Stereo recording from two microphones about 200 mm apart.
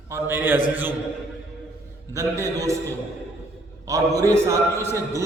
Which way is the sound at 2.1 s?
15° right (ahead or behind).